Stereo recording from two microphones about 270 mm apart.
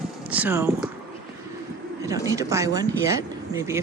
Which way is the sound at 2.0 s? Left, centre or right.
Centre.